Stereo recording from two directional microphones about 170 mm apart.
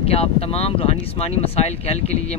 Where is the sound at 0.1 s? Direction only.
35° left (ahead or behind).